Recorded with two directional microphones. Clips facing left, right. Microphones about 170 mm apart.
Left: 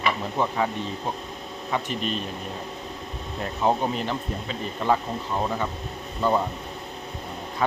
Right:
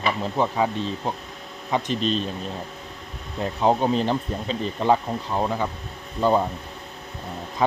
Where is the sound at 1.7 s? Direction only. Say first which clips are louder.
Right 4 dB; 20° right (ahead or behind).